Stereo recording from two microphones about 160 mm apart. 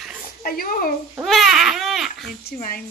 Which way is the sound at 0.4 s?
65° left (ahead or behind).